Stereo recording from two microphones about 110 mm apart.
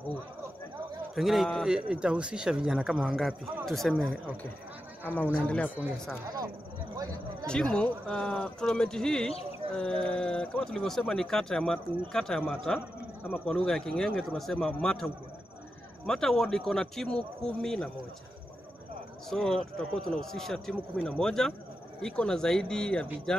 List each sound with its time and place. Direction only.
1.1 s speech: centre (ahead or behind)
5.0 s speech: 15° left (ahead or behind)
6.2 s speech: 35° right (ahead or behind)
7.4 s speech: 5° left (ahead or behind)
16.1 s speech: 5° left (ahead or behind)
19.3 s speech: 5° left (ahead or behind)